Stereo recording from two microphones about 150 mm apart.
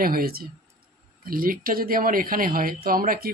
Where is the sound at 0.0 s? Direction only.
80° right.